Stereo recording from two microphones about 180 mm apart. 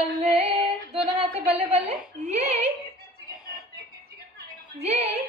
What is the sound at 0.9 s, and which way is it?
A woman's voice, 35° right (ahead or behind).